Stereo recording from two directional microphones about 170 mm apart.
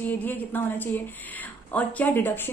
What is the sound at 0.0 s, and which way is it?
Speech, 10° left (ahead or behind).